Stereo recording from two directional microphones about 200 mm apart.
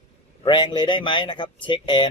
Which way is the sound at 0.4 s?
20° left (ahead or behind).